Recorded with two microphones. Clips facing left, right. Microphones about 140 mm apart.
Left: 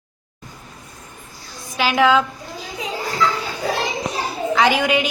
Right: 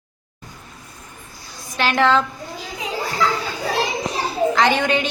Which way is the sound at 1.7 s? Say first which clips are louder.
Left 1 dB; 5° left (ahead or behind).